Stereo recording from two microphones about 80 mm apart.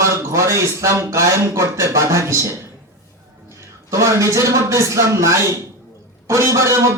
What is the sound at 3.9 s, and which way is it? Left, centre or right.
Speech, right.